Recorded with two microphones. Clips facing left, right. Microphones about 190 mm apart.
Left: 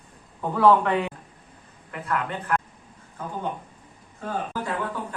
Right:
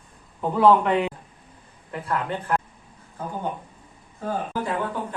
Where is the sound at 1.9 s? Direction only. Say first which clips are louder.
Right 1 dB; 30° right (ahead or behind).